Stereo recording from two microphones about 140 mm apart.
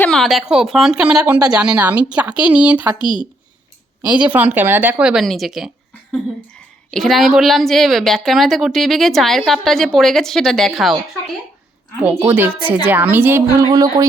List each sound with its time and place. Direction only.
0.0 s a woman's voice: 5° left (ahead or behind)
3.0 s a woman's voice: 35° left (ahead or behind)
4.0 s speech: 10° right (ahead or behind)
6.9 s a woman's voice: centre (ahead or behind)
12.6 s speech: 10° right (ahead or behind)
13.7 s speech: 25° right (ahead or behind)